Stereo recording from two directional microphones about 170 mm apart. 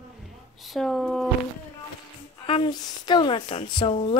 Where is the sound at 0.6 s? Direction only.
Centre (ahead or behind).